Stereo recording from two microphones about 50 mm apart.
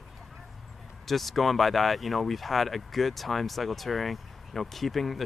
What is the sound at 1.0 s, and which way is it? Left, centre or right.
Speech, centre.